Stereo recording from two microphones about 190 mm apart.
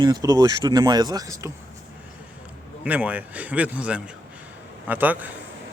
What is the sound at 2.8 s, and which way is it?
Speech, 5° right (ahead or behind).